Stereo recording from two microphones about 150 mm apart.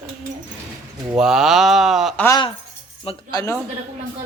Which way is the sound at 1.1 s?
5° right (ahead or behind).